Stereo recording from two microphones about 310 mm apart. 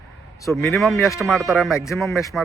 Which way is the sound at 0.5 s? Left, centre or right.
Centre.